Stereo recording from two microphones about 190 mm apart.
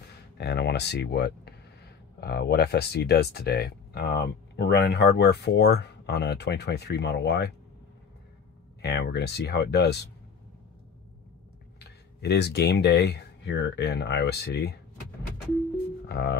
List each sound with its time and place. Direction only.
0.4 s speech: 60° left (ahead or behind)
8.8 s speech: 60° left (ahead or behind)
12.2 s speech: 60° left (ahead or behind)
16.1 s music: 60° left (ahead or behind)